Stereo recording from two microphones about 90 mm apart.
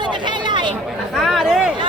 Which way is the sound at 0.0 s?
60° right (ahead or behind).